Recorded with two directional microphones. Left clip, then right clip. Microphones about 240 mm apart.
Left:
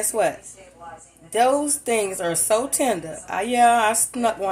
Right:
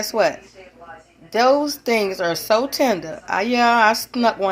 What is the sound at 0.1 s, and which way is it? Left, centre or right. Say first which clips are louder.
A woman's voice: right 4 dB; right.